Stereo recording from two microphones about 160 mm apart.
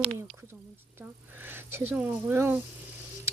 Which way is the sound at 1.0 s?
15° right (ahead or behind).